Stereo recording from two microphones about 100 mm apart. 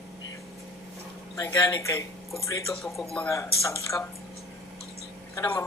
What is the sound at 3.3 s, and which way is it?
Speech, 30° left (ahead or behind).